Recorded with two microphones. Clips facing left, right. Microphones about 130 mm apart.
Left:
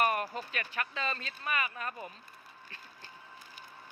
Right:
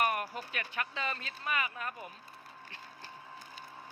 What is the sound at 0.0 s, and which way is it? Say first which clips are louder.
Music: left 2 dB; 5° right (ahead or behind).